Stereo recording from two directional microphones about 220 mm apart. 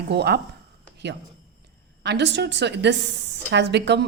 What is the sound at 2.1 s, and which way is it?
A woman's voice, 50° right (ahead or behind).